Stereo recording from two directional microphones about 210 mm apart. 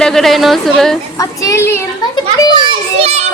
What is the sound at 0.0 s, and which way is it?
Speech, centre (ahead or behind).